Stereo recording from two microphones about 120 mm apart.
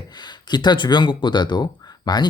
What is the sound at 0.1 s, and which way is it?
Speech, 35° left (ahead or behind).